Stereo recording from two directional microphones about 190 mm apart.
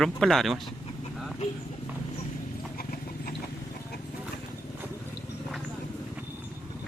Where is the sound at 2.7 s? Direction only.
50° left (ahead or behind).